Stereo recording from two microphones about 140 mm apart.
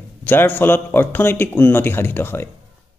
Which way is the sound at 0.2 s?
15° left (ahead or behind).